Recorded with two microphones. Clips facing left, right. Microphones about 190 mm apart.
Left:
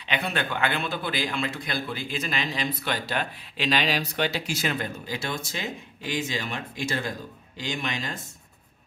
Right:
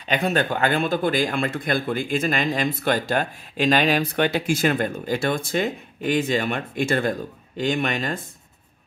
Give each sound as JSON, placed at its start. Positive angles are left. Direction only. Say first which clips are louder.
{"t": 0.1, "sound": "a man's voice", "louder": "right 7 dB", "side_deg": -45}